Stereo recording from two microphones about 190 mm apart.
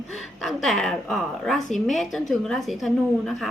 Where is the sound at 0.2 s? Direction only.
Centre (ahead or behind).